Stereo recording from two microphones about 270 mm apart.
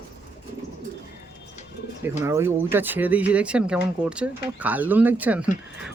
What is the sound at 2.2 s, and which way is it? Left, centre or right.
A man's voice, centre.